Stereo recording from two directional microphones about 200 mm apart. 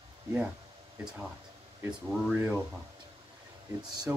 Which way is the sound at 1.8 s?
10° right (ahead or behind).